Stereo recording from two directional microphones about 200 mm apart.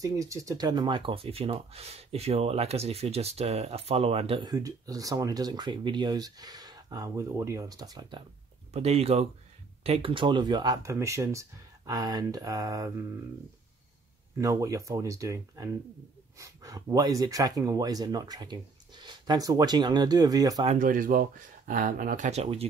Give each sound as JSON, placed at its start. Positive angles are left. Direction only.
{"t": 0.0, "sound": "speech", "side_deg": -15}
{"t": 8.7, "sound": "speech", "side_deg": -30}
{"t": 14.4, "sound": "speech", "side_deg": -15}
{"t": 20.6, "sound": "speech", "side_deg": -40}